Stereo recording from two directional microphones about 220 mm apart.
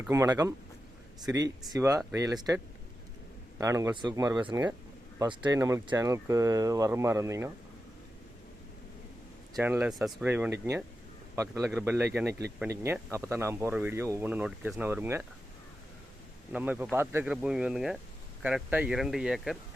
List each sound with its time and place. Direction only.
0.1 s speech: 15° right (ahead or behind)
3.6 s speech: 15° right (ahead or behind)
9.6 s speech: 5° right (ahead or behind)
16.5 s speech: 5° right (ahead or behind)